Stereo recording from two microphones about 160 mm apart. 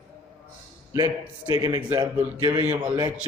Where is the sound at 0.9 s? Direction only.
25° right (ahead or behind).